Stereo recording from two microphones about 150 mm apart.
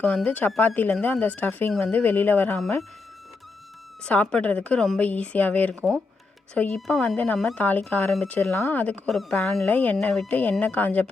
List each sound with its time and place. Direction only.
0.0 s a woman's voice: 10° left (ahead or behind)
4.0 s a woman's voice: 10° left (ahead or behind)